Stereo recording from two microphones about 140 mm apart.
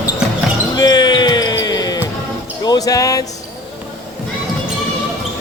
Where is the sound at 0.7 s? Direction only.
30° left (ahead or behind).